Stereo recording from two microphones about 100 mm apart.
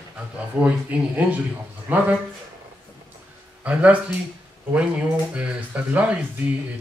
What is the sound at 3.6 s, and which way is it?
Speech, 15° right (ahead or behind).